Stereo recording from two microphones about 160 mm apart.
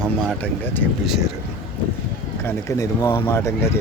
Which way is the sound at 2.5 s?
20° left (ahead or behind).